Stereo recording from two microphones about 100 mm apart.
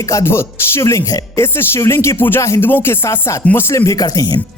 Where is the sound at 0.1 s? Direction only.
30° left (ahead or behind).